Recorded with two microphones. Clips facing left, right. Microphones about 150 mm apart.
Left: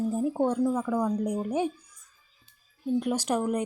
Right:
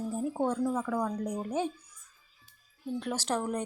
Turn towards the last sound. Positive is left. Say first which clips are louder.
# left 5 dB
turn(degrees=10)  # may be behind; listen again after turning